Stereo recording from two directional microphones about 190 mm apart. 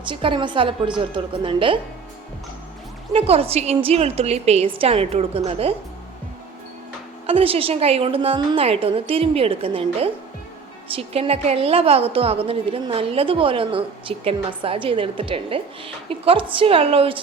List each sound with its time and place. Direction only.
0.0 s a woman's voice: 25° right (ahead or behind)
3.1 s a woman's voice: 30° right (ahead or behind)
7.3 s a woman's voice: 30° right (ahead or behind)